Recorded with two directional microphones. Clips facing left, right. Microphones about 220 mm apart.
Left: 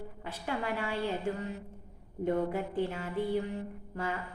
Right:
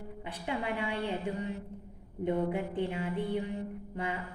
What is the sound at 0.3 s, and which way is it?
A woman's voice, 15° right (ahead or behind).